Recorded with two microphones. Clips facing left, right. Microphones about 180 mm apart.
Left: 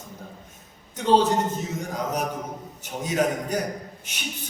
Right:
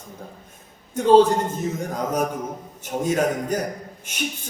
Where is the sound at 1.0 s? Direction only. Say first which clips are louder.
Right 5 dB; 50° right (ahead or behind).